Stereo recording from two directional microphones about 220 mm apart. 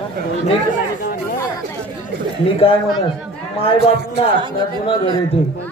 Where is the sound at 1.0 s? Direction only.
40° left (ahead or behind).